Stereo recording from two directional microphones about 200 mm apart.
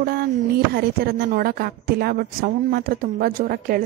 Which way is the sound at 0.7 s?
50° right (ahead or behind).